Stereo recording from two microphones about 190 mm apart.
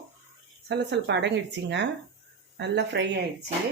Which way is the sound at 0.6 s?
65° right (ahead or behind).